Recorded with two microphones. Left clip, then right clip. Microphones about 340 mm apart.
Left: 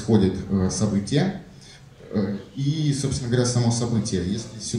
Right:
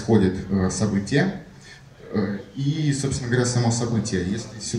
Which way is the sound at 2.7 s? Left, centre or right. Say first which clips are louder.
Right 1 dB; centre.